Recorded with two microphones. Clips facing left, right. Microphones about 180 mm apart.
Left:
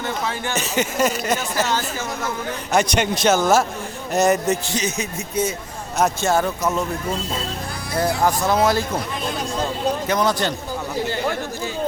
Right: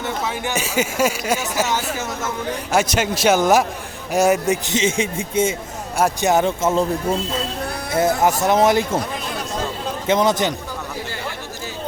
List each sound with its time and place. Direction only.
0.4 s speech: 10° right (ahead or behind)
4.7 s speech: 25° right (ahead or behind)
8.2 s speech: 20° right (ahead or behind)
10.1 s speech: 20° right (ahead or behind)